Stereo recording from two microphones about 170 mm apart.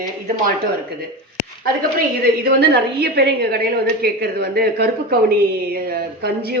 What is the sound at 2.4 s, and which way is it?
A woman's voice, 70° right (ahead or behind).